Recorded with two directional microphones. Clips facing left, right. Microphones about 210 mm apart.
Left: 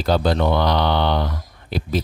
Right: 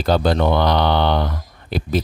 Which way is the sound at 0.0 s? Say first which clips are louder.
Right 2 dB; 55° right (ahead or behind).